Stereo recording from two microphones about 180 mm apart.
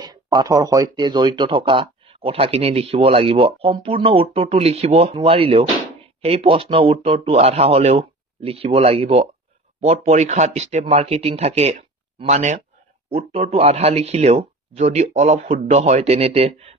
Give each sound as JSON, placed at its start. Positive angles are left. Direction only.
{"t": 0.0, "sound": "speech", "side_deg": -25}